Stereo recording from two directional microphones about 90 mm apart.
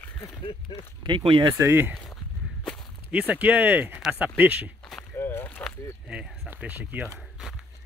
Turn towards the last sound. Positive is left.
turn(degrees=-20)  # may be behind; listen again after turning